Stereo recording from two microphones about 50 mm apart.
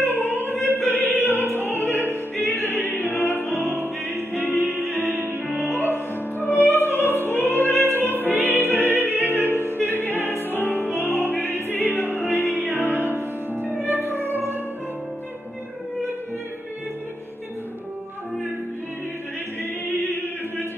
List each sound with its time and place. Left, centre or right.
0.2 s opera: left
1.3 s music: left
1.6 s opera: right
1.9 s opera: left
3.6 s music: right
5.7 s music: left
8.8 s music: right
10.1 s music: left
10.6 s opera: left
12.4 s music: right